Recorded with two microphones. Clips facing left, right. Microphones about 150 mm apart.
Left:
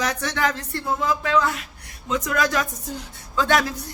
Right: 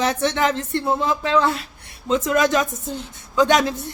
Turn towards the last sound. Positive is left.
turn(degrees=-20)  # may be behind; listen again after turning